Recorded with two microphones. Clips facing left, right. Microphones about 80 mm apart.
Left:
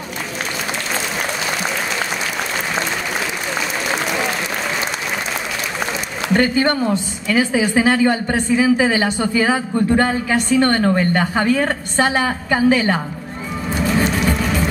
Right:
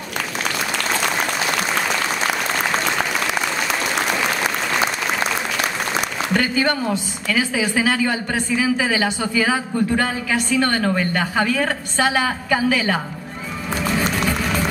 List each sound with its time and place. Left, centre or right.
6.3 s a woman's voice: left